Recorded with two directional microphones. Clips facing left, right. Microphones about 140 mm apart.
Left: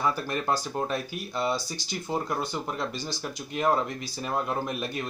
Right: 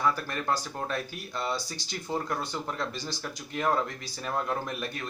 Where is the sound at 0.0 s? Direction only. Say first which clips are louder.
Left 1 dB; 20° left (ahead or behind).